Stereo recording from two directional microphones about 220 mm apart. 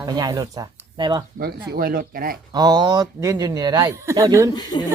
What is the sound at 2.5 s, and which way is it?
Speech, 20° right (ahead or behind).